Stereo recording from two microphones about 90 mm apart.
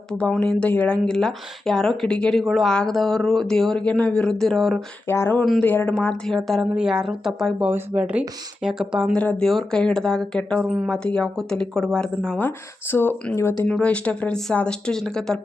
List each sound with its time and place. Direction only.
0.1 s speech: 10° left (ahead or behind)
5.0 s speech: 30° left (ahead or behind)
6.2 s speech: 5° left (ahead or behind)
6.7 s speech: 5° right (ahead or behind)
7.6 s speech: 15° right (ahead or behind)
9.1 s speech: 15° left (ahead or behind)
10.6 s speech: 10° right (ahead or behind)
10.8 s speech: 10° left (ahead or behind)
12.4 s speech: 25° left (ahead or behind); by 15.4 s 5° left (ahead or behind)